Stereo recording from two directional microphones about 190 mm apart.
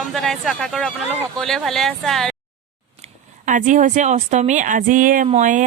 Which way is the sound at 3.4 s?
40° right (ahead or behind).